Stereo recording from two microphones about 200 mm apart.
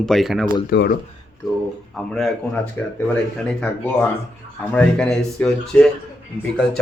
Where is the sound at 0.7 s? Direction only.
50° left (ahead or behind).